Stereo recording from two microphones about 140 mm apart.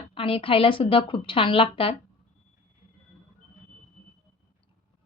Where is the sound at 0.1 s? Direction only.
40° left (ahead or behind).